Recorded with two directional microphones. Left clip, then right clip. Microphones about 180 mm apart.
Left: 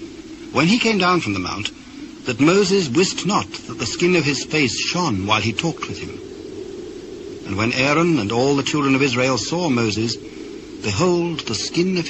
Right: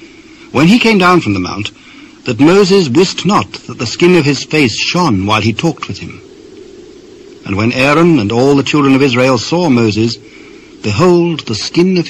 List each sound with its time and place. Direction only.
0.5 s a man's voice: 30° right (ahead or behind)
7.4 s a man's voice: 30° right (ahead or behind)